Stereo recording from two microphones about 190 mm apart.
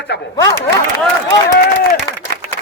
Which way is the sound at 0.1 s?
65° left (ahead or behind).